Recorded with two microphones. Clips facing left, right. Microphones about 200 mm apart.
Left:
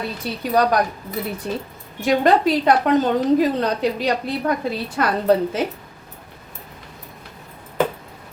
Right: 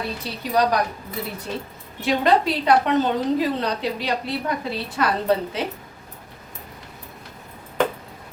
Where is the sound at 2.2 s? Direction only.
45° left (ahead or behind).